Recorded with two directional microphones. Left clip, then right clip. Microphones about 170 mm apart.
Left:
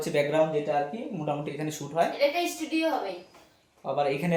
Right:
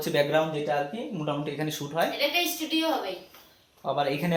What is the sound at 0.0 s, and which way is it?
Speech, 10° right (ahead or behind).